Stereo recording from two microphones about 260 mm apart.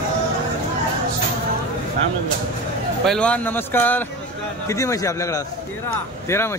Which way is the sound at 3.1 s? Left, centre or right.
Centre.